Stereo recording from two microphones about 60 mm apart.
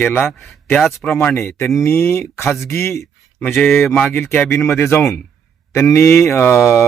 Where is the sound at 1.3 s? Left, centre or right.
Left.